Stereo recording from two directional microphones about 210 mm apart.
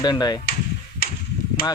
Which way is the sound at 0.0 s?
20° left (ahead or behind).